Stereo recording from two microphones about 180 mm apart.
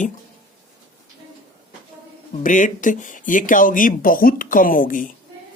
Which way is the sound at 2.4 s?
45° left (ahead or behind).